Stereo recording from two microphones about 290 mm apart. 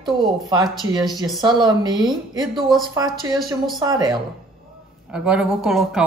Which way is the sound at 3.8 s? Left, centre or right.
Centre.